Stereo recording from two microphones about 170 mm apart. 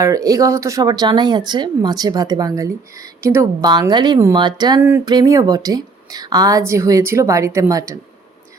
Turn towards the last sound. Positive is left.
turn(degrees=-20)  # may be behind; listen again after turning